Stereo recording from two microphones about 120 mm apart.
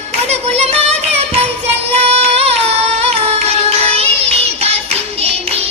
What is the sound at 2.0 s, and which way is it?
Music, 55° right (ahead or behind).